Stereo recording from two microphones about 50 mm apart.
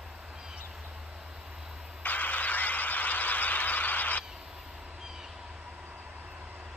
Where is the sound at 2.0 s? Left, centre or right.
Left.